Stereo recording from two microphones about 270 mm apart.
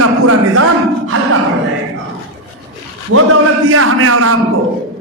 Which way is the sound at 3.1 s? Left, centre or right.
Right.